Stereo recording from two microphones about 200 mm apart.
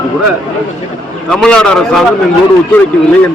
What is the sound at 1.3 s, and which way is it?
Speech, 5° left (ahead or behind).